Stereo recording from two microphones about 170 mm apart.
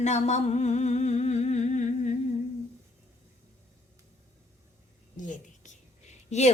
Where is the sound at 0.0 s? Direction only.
45° left (ahead or behind).